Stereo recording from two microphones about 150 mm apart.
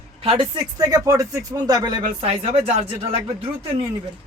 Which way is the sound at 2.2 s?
45° right (ahead or behind).